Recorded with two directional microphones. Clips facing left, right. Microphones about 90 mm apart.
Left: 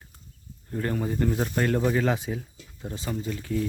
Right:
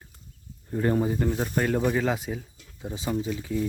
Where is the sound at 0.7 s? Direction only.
20° right (ahead or behind).